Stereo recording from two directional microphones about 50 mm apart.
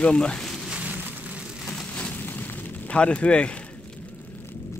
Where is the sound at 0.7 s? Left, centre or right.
Right.